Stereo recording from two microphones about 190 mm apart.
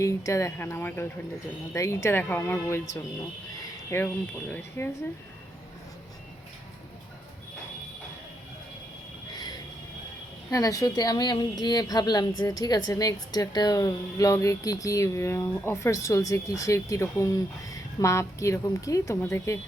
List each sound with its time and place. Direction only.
0.0 s a woman's voice: 15° left (ahead or behind)
10.5 s a woman's voice: 20° left (ahead or behind)